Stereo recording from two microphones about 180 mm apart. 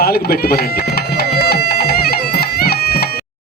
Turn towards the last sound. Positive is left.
turn(degrees=60)  # may be behind; listen again after turning